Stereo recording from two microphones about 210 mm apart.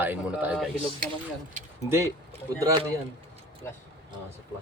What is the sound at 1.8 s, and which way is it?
Speech, 15° right (ahead or behind).